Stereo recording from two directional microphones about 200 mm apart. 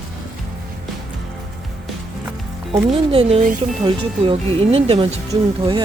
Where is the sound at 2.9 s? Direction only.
30° right (ahead or behind).